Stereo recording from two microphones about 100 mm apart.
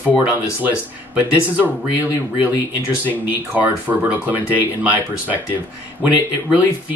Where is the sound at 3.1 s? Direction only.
15° right (ahead or behind).